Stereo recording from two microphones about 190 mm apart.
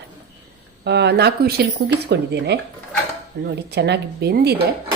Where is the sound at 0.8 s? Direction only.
60° right (ahead or behind).